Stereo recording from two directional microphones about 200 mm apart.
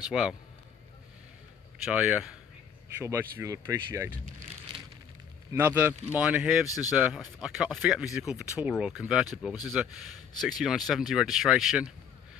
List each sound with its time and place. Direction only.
0.0 s speech: 5° right (ahead or behind)
1.9 s speech: 5° right (ahead or behind)
4.4 s a sound: 30° right (ahead or behind)
5.5 s speech: 10° right (ahead or behind)